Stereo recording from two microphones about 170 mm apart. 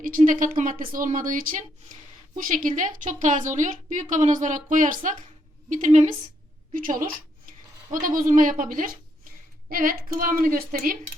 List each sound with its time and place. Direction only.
0.0 s a woman's voice: 50° right (ahead or behind)